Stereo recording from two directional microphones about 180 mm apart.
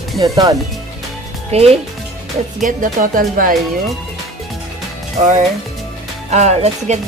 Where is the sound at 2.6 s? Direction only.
45° right (ahead or behind).